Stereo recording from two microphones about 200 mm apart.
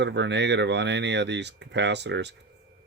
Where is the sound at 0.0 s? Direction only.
60° right (ahead or behind).